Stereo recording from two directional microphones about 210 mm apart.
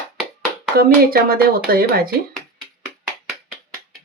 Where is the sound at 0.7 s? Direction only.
45° right (ahead or behind).